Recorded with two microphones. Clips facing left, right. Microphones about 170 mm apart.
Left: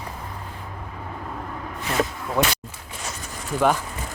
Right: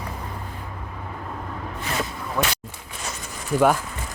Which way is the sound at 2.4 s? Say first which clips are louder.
Left 3 dB; 20° left (ahead or behind).